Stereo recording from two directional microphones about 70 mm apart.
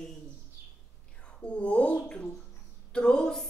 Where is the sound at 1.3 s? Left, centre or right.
Centre.